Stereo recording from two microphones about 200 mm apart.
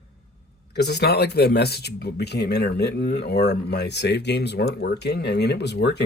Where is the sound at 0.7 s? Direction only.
55° left (ahead or behind).